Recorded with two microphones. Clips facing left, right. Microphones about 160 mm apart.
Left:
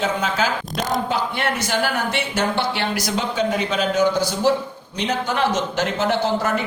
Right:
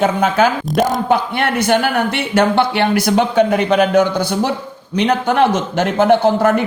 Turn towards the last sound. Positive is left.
turn(degrees=-55)  # may be behind; listen again after turning